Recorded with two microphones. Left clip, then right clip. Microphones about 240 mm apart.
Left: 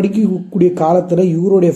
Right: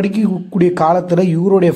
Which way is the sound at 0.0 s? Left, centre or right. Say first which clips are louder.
Left 2 dB; right.